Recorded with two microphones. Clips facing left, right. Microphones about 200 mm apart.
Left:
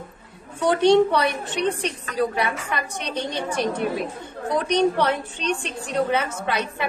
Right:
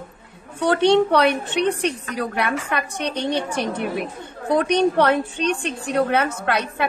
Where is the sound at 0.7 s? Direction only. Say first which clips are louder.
Even; 65° right (ahead or behind).